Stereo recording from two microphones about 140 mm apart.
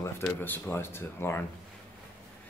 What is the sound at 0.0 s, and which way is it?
Speech, 15° left (ahead or behind).